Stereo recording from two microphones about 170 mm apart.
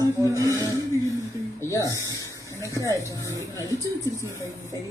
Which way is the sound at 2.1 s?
15° left (ahead or behind).